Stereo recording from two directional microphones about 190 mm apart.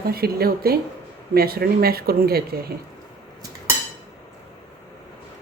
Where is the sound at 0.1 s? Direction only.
55° right (ahead or behind).